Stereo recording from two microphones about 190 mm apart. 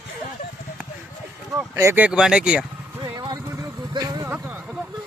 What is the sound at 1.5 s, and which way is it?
Speech, 15° right (ahead or behind).